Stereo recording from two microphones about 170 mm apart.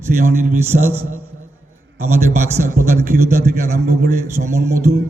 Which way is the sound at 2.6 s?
55° right (ahead or behind).